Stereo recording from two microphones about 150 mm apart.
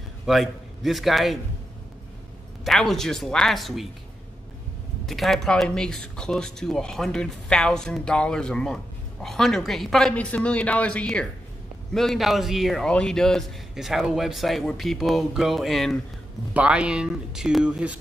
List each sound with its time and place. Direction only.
0.3 s speech: centre (ahead or behind)
2.6 s speech: centre (ahead or behind)
5.0 s speech: centre (ahead or behind)